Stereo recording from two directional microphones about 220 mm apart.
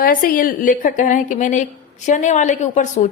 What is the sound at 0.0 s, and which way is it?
A woman's voice, 40° left (ahead or behind).